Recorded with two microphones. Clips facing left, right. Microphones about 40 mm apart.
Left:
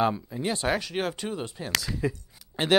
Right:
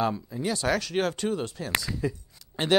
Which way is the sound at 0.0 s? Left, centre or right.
Centre.